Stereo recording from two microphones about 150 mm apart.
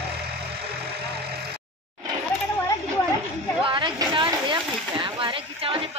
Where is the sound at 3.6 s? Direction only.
30° right (ahead or behind).